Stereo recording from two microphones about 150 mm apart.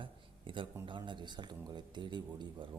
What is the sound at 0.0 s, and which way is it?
Speech, 35° right (ahead or behind).